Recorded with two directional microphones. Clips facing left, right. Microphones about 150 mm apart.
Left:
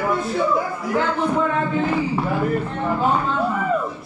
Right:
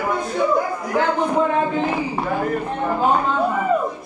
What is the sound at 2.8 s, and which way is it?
Music, 15° right (ahead or behind).